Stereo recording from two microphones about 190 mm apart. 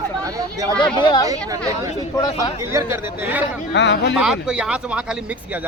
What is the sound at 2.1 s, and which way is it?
Speech, 20° left (ahead or behind).